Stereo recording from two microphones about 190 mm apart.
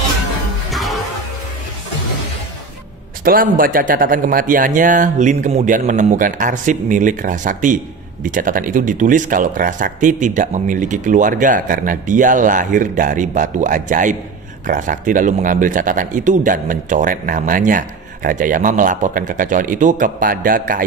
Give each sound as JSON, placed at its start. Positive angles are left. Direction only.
{"t": 0.7, "sound": "music", "side_deg": 0}
{"t": 3.3, "sound": "a man's voice", "side_deg": -50}